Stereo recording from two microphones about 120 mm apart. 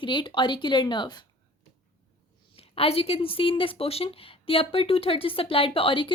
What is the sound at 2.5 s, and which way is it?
Speech, 55° left (ahead or behind).